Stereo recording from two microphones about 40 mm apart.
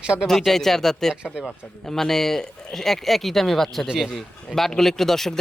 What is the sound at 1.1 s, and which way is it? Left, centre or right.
Speech, centre.